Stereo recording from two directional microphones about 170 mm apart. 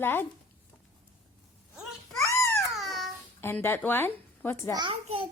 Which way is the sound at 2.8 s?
Centre (ahead or behind).